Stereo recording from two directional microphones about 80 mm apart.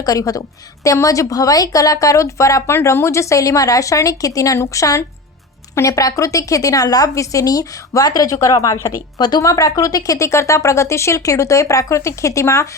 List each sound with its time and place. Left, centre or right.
0.0 s a woman's voice: left
9.1 s speech: left
9.4 s speech: left